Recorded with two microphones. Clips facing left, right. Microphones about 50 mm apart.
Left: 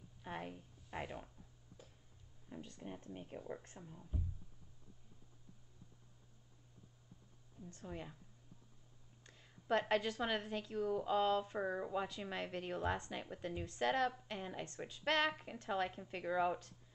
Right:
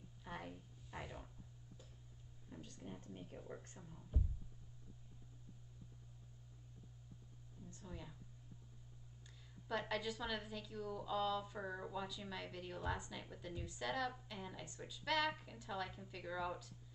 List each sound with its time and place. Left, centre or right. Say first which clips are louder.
0.2 s a sound: left 4 dB; left
0.8 s speech: left 5 dB; left
2.5 s a woman's voice: left 4 dB; left
3.7 s speech: left 3 dB; centre
7.8 s a woman's voice: left 6 dB; left
9.2 s a sound: left 3 dB; left
10.2 s a woman's voice: left 6 dB; left
11.6 s a woman's voice: left 6 dB; centre
11.9 s a woman's voice: left 5 dB; left